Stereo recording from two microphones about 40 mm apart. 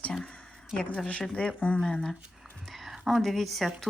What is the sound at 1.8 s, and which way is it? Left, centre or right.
Speech, centre.